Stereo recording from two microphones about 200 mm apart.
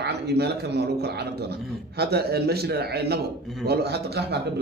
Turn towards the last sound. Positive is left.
turn(degrees=-55)  # may be behind; listen again after turning